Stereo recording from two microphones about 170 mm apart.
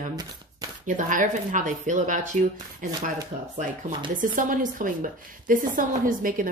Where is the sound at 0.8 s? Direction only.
50° right (ahead or behind).